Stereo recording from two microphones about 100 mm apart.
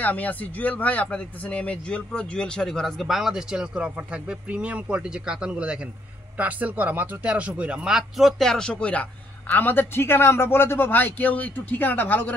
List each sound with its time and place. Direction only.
0.0 s a man's voice: 15° left (ahead or behind)